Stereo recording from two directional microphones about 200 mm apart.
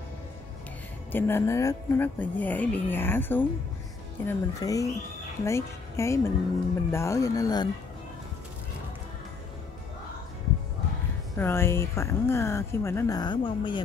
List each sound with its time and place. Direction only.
1.1 s speech: 10° left (ahead or behind)
11.3 s speech: 10° left (ahead or behind)